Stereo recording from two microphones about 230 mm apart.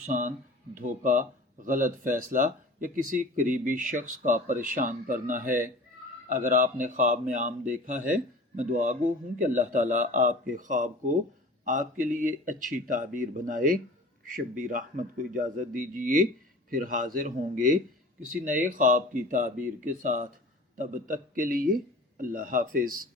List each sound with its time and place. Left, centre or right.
0.0 s speech: right